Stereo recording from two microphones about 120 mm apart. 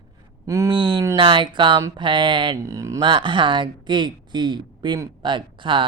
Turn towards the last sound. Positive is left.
turn(degrees=-45)  # may be behind; listen again after turning